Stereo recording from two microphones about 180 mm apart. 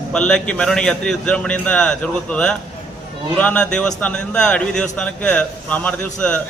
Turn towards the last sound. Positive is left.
turn(degrees=5)  # may be behind; listen again after turning